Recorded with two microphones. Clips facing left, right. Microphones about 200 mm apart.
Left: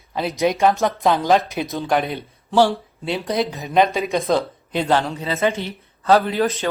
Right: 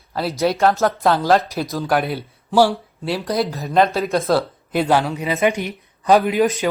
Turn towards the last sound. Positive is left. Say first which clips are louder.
# right 3 dB
turn(degrees=-15)  # may be behind; listen again after turning